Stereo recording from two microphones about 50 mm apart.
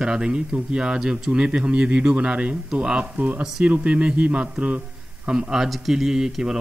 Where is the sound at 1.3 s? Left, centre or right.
Centre.